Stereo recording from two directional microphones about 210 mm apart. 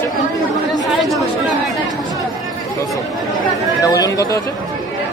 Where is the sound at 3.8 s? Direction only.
15° left (ahead or behind).